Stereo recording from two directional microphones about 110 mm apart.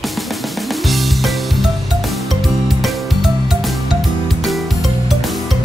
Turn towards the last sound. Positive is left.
turn(degrees=0)  # may be behind; listen again after turning